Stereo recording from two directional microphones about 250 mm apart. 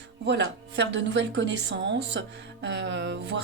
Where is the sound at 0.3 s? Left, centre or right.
Right.